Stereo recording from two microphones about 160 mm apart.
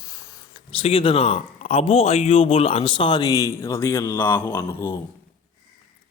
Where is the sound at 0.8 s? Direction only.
35° left (ahead or behind); by 4.9 s 15° left (ahead or behind).